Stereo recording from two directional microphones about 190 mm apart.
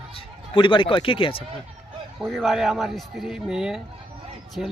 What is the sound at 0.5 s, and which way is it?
Speech, 25° left (ahead or behind).